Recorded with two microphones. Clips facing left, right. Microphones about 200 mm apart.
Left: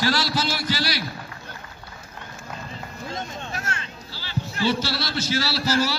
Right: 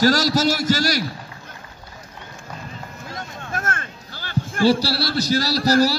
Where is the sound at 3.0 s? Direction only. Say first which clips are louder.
Left 3 dB; 25° left (ahead or behind).